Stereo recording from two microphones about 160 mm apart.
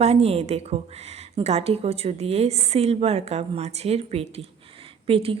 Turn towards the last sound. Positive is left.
turn(degrees=-35)  # may be behind; listen again after turning